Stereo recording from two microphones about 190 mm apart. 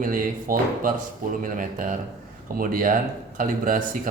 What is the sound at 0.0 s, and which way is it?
Speech, 45° right (ahead or behind).